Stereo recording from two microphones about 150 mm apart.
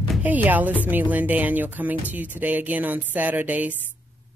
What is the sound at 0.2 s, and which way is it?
Speech, 10° right (ahead or behind).